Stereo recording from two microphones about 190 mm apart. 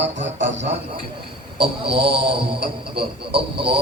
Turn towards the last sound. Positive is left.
turn(degrees=-30)  # may be behind; listen again after turning